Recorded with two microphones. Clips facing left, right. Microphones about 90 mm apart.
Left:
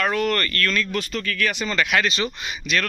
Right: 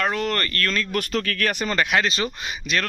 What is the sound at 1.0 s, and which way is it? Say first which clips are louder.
Speech: right 2 dB; 60° right (ahead or behind).